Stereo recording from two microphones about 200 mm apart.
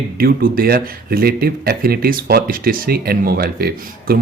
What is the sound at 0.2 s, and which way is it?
Speech, 45° right (ahead or behind).